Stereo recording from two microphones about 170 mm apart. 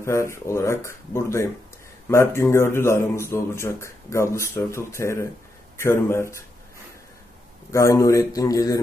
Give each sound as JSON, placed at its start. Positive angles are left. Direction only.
{"t": 0.0, "sound": "speech", "side_deg": 15}
{"t": 7.7, "sound": "a man's voice", "side_deg": 15}